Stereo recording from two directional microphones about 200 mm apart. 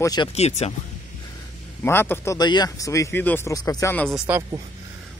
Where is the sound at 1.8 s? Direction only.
10° left (ahead or behind).